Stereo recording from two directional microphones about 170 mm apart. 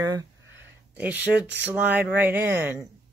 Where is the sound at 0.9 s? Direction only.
10° right (ahead or behind).